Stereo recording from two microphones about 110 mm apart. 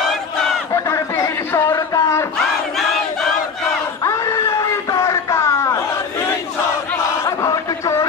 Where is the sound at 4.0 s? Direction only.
25° left (ahead or behind).